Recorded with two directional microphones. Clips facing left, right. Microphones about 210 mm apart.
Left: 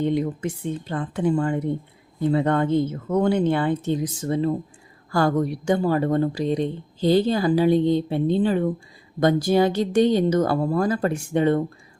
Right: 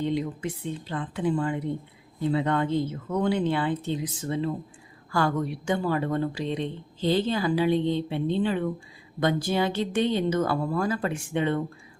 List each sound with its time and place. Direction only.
0.0 s a woman's voice: 50° left (ahead or behind)